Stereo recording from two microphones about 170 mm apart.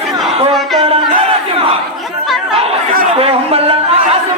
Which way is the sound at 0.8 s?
35° right (ahead or behind).